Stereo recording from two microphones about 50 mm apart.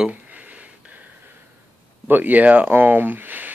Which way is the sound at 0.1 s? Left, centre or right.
Right.